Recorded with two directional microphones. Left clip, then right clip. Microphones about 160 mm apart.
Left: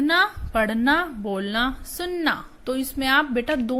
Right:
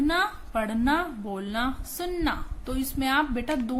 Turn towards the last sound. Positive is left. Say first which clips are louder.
# left 5 dB
turn(degrees=30)  # may be behind; listen again after turning